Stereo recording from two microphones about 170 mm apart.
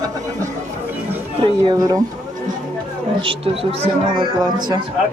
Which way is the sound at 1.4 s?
25° right (ahead or behind).